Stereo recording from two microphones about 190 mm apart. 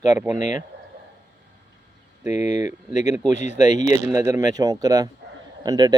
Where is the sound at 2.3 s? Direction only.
40° left (ahead or behind).